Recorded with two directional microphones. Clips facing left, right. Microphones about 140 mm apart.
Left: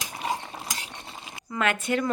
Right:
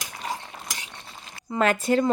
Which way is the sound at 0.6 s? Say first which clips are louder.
Left 2 dB; 30° left (ahead or behind).